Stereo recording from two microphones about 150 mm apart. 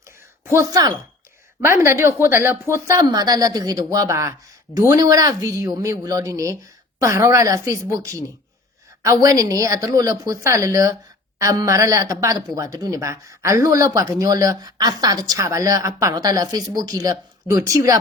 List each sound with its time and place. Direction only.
0.4 s speech: 20° right (ahead or behind)